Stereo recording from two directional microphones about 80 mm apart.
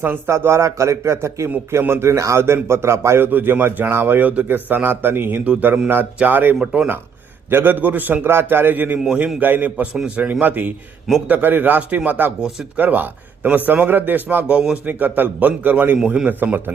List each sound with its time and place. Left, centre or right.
0.3 s a man's voice: right; by 12.8 s centre
12.8 s a man's voice: right